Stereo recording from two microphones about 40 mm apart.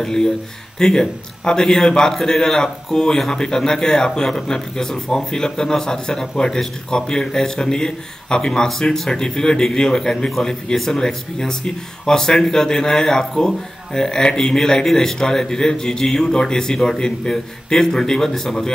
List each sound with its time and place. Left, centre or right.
0.0 s a man's voice: centre